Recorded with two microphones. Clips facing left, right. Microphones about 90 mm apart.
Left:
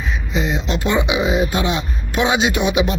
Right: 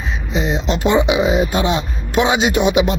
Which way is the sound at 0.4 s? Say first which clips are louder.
Right 5 dB; 30° right (ahead or behind).